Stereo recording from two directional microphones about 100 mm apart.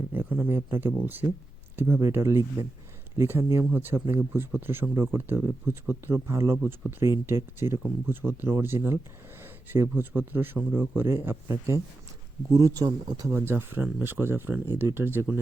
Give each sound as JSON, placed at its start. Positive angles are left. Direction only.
{"t": 0.1, "sound": "a man's voice", "side_deg": -20}
{"t": 13.5, "sound": "a man's voice", "side_deg": -20}